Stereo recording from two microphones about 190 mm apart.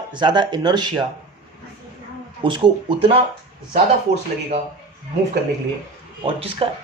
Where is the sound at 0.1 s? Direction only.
25° right (ahead or behind).